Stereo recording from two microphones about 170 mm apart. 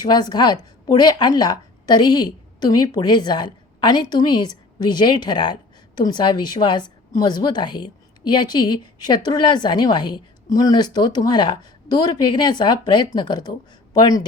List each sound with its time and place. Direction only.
0.0 s a woman's voice: 25° left (ahead or behind)